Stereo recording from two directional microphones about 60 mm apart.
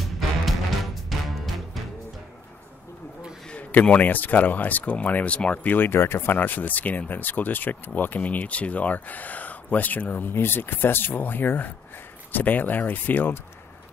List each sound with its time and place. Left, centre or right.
0.0 s music: centre
3.4 s speech: centre